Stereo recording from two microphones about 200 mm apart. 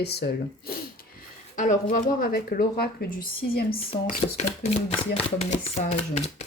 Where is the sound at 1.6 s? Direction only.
40° left (ahead or behind).